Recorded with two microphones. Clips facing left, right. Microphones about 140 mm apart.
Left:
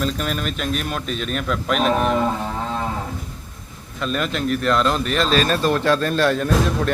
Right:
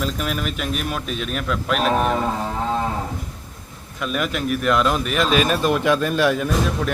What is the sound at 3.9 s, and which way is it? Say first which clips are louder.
Speech: left 1 dB; 5° right (ahead or behind).